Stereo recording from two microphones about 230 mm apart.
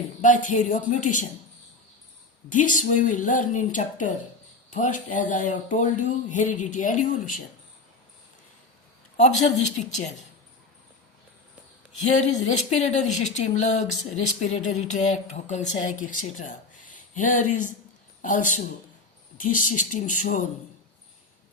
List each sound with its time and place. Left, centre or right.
0.2 s speech: left
2.5 s speech: left
9.1 s speech: left
12.0 s a man's voice: left